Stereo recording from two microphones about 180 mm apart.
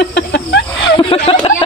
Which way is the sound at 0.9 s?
30° left (ahead or behind).